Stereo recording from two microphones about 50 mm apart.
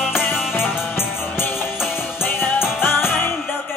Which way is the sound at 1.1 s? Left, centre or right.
Left.